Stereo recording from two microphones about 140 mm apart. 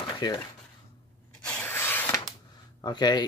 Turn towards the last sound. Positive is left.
turn(degrees=30)  # may be behind; listen again after turning